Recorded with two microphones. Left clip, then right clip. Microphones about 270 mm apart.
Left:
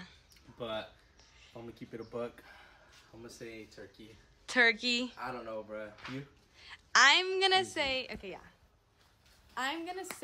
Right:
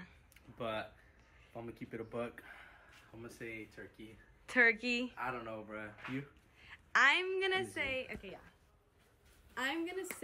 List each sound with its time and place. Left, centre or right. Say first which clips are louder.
0.0 s a sound: left 4 dB; centre
1.5 s a woman's voice: even; centre
9.5 s a woman's voice: left 2 dB; centre